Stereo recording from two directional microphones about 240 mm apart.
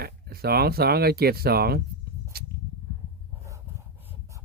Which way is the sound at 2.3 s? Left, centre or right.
Right.